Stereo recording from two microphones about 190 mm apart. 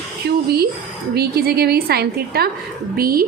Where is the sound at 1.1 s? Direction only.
55° right (ahead or behind).